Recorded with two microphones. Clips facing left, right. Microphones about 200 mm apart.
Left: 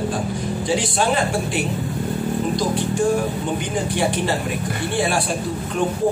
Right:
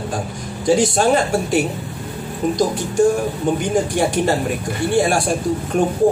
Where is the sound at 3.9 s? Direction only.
45° right (ahead or behind).